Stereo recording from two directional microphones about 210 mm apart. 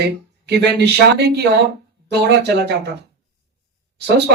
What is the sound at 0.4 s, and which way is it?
Speech, 50° right (ahead or behind).